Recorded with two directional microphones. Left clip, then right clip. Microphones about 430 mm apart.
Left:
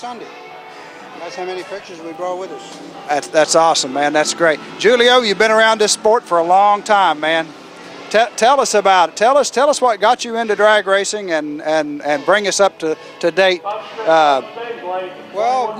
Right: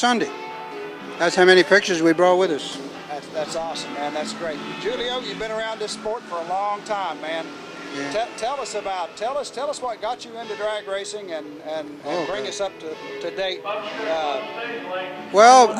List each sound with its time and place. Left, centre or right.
1.2 s speech: right
3.3 s speech: left
15.4 s speech: right